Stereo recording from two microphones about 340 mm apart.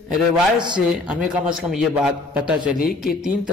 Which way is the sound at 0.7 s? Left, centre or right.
Centre.